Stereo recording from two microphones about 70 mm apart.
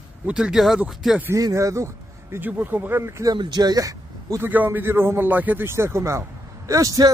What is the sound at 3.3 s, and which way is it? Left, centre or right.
Speech, right.